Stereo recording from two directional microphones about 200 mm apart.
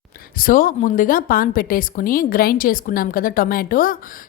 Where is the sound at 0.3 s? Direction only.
45° left (ahead or behind).